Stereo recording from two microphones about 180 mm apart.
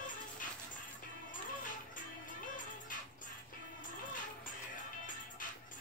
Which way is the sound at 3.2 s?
50° left (ahead or behind).